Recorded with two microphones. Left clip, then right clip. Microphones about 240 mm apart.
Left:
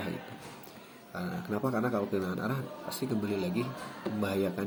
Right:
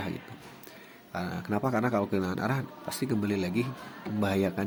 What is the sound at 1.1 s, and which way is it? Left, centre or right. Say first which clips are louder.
Speech: right 3 dB; right.